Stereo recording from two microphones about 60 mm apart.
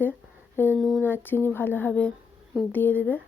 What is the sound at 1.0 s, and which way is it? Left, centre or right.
Speech, left.